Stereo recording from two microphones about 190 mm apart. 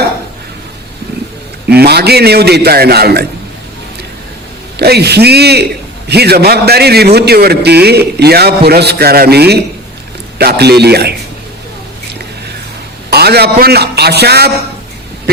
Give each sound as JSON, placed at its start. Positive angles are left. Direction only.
{"t": 1.7, "sound": "a man's voice", "side_deg": -55}
{"t": 4.8, "sound": "a man's voice", "side_deg": -60}
{"t": 13.1, "sound": "a man's voice", "side_deg": -55}